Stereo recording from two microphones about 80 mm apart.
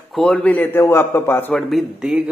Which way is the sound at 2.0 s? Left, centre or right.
Centre.